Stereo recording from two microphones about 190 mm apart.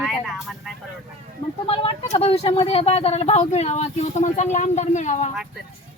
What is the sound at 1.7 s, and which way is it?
Speech, 30° left (ahead or behind).